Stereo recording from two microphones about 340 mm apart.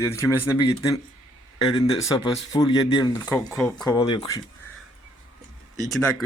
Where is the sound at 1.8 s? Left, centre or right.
Centre.